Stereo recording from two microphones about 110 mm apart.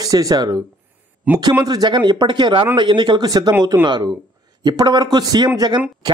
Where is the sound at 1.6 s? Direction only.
35° right (ahead or behind).